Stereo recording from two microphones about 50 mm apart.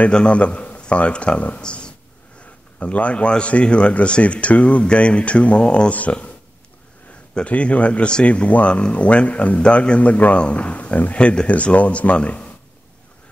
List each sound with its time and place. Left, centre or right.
0.1 s speech: left
1.6 s a sound: centre
2.8 s speech: left
7.3 s speech: left